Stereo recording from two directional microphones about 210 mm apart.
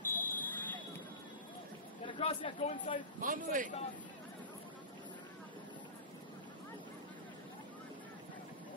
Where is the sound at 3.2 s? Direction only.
40° right (ahead or behind).